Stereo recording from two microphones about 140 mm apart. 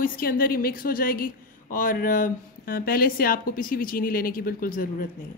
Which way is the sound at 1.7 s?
80° left.